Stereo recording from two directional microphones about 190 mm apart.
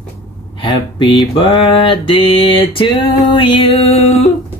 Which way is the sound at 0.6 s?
25° left (ahead or behind).